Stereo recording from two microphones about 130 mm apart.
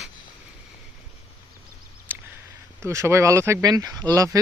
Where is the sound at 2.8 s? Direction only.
20° right (ahead or behind).